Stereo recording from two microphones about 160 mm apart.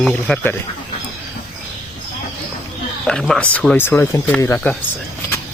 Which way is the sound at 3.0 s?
5° left (ahead or behind).